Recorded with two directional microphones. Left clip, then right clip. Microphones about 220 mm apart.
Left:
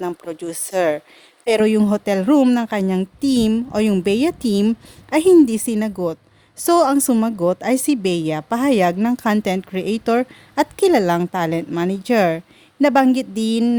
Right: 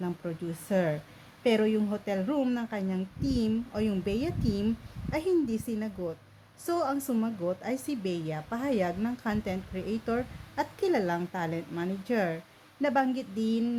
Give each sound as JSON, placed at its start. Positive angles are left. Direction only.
{"t": 0.2, "sound": "a woman's voice", "side_deg": 50}